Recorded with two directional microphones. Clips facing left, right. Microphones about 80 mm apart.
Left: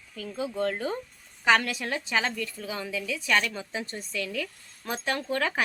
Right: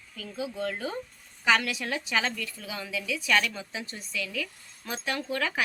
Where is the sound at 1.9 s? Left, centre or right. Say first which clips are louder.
Left 1 dB; left.